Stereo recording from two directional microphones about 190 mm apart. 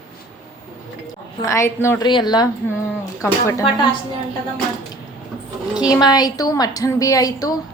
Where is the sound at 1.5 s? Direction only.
15° left (ahead or behind).